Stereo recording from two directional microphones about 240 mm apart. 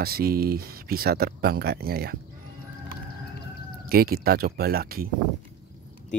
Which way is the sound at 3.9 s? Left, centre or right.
Right.